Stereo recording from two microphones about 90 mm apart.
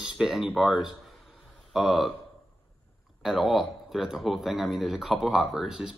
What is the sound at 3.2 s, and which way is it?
Speech, centre (ahead or behind).